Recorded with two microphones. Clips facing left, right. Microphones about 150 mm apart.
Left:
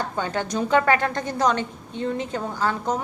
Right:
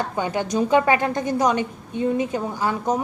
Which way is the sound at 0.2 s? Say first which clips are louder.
Right 4 dB; 15° right (ahead or behind).